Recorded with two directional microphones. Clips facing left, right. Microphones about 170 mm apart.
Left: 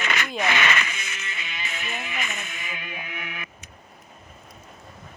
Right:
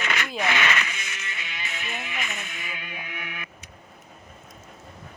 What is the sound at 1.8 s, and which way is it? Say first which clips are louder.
Music: left 1 dB; 40° left (ahead or behind).